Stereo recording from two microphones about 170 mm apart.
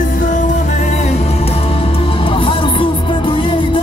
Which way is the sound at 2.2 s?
30° left (ahead or behind).